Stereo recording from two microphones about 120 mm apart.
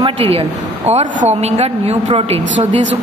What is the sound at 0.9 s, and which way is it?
Speech, 80° right.